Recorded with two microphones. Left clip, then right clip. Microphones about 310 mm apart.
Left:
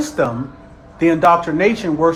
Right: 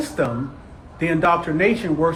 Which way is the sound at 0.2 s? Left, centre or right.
Centre.